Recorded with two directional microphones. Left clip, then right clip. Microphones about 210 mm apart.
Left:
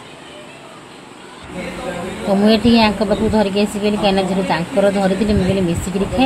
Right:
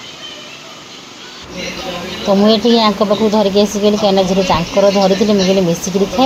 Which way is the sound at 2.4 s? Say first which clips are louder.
Right 2 dB; 20° right (ahead or behind).